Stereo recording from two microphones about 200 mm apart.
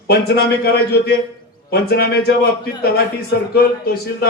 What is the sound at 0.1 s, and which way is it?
Speech, 55° left (ahead or behind).